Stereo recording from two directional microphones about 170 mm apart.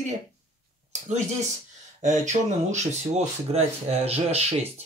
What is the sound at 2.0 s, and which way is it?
Speech, 45° right (ahead or behind).